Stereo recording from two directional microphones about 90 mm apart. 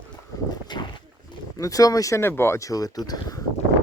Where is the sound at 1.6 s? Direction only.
40° left (ahead or behind).